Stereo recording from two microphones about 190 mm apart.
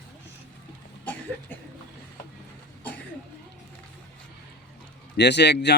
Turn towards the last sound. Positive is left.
turn(degrees=65)  # may be behind; listen again after turning